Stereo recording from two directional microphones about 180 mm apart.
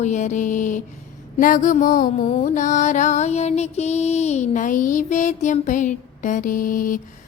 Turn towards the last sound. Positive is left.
turn(degrees=50)  # may be behind; listen again after turning